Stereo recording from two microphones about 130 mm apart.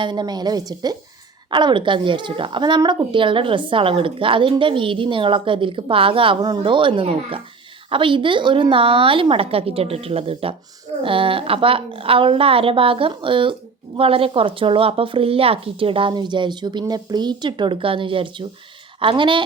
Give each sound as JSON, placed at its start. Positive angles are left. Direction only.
{"t": 0.0, "sound": "a woman's voice", "side_deg": -35}